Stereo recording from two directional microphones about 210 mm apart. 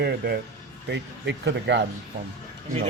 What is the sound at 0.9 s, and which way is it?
Speech, 55° right (ahead or behind).